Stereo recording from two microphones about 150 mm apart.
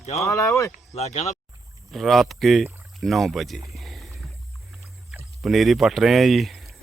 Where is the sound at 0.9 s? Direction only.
50° left (ahead or behind).